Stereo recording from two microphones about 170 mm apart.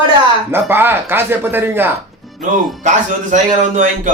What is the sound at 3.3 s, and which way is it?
Speech, 45° right (ahead or behind).